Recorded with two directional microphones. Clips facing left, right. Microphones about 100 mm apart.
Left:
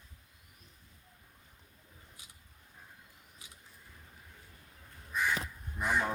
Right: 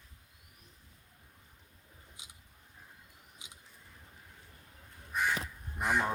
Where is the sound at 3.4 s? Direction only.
20° right (ahead or behind).